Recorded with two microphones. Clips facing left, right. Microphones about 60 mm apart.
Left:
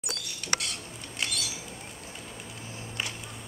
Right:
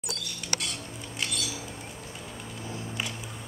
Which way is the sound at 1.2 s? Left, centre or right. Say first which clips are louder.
Even; centre.